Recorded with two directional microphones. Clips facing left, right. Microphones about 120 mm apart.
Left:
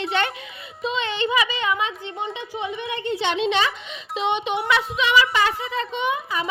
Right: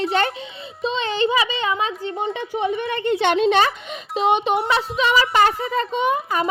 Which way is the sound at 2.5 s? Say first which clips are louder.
Right 6 dB; 55° right (ahead or behind).